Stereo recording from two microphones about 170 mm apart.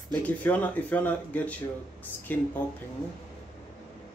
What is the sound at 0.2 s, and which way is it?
Speech, 10° left (ahead or behind).